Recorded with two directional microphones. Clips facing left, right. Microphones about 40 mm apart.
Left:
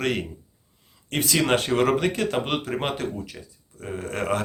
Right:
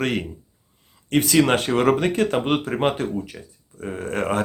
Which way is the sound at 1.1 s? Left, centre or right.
Right.